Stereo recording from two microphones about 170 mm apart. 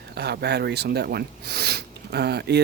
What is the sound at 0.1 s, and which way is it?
Speech, 75° right (ahead or behind).